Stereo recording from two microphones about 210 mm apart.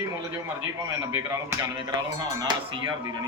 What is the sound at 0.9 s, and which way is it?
Speech, 15° right (ahead or behind).